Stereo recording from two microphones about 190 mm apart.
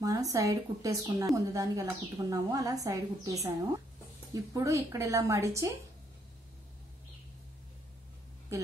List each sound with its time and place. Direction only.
0.0 s a woman's voice: 20° right (ahead or behind)